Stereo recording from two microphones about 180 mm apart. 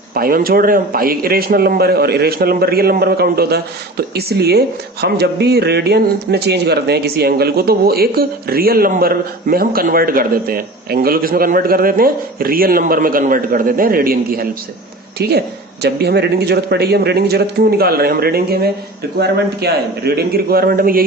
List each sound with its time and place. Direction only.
0.1 s a man's voice: 55° right (ahead or behind)